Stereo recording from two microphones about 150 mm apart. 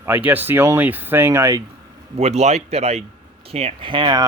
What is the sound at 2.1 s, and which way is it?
Speech, 45° right (ahead or behind).